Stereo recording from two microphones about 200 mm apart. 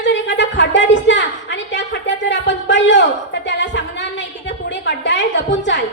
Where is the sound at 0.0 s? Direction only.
65° left (ahead or behind).